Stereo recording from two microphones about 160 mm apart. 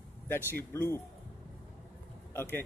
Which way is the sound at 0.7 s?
15° left (ahead or behind).